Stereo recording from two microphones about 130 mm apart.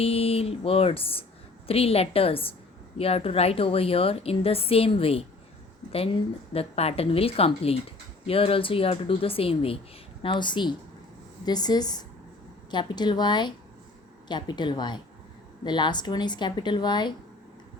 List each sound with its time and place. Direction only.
0.0 s speech: 50° left (ahead or behind)